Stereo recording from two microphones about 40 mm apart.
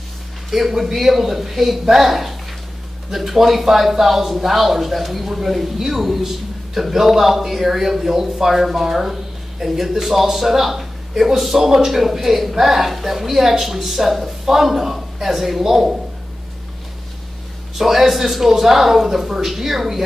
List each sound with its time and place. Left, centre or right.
0.5 s a man's voice: centre
17.7 s a man's voice: centre